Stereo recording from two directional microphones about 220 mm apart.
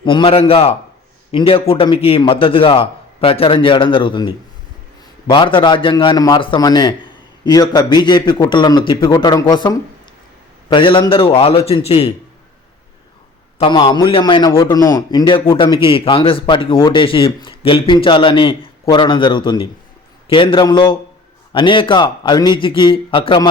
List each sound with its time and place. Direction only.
0.0 s a man's voice: 20° left (ahead or behind)
13.6 s a man's voice: 20° left (ahead or behind)